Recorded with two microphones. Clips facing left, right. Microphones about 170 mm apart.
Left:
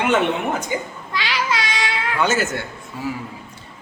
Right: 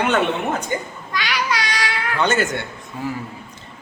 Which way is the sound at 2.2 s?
5° left (ahead or behind).